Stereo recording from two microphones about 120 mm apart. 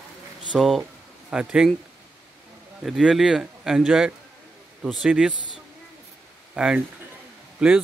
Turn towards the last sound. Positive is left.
turn(degrees=-5)  # may be behind; listen again after turning